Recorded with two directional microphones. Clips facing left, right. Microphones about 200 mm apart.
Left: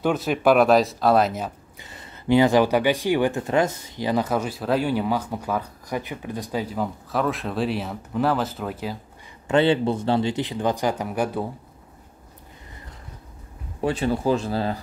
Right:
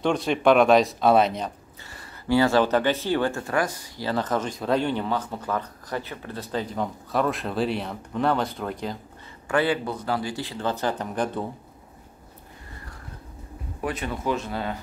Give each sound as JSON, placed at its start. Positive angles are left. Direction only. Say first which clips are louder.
{"t": 0.0, "sound": "speech", "louder": "left 1 dB", "side_deg": 5}
{"t": 1.8, "sound": "speech", "louder": "left 1 dB", "side_deg": 20}
{"t": 9.5, "sound": "speech", "louder": "left 5 dB", "side_deg": 25}
{"t": 13.7, "sound": "speech", "louder": "left 7 dB", "side_deg": 30}